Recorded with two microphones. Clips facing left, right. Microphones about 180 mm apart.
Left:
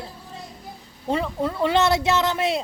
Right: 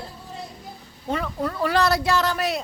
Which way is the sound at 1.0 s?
30° left (ahead or behind).